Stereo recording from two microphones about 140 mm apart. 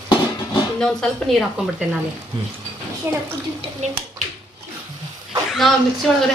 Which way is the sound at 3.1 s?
20° right (ahead or behind).